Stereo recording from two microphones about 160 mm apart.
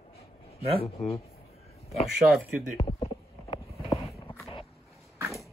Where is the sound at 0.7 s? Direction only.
40° left (ahead or behind).